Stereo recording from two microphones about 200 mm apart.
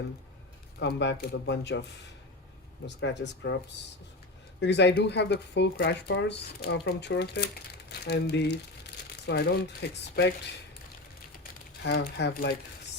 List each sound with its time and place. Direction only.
0.8 s speech: 60° left (ahead or behind)
2.8 s speech: 60° left (ahead or behind)
4.6 s speech: 60° left (ahead or behind)
11.8 s speech: 55° left (ahead or behind)